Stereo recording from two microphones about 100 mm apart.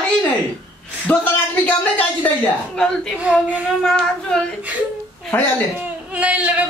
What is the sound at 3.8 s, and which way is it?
Speech, 5° left (ahead or behind).